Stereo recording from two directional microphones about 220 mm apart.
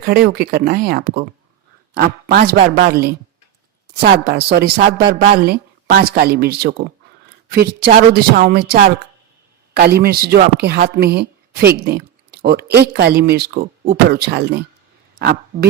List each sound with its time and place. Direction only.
0.0 s a woman's voice: 45° right (ahead or behind)